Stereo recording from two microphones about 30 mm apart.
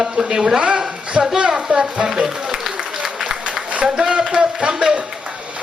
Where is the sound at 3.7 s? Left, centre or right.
Right.